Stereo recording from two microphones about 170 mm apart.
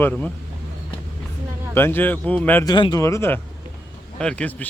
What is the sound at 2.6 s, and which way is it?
Speech, 25° left (ahead or behind).